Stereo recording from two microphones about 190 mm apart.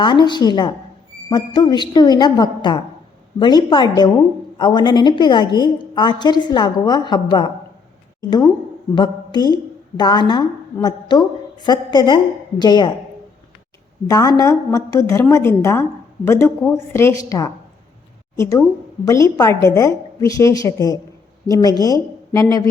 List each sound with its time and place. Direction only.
0.0 s a woman's voice: 25° left (ahead or behind)
9.0 s a woman's voice: 20° left (ahead or behind)
14.1 s a woman's voice: 20° left (ahead or behind)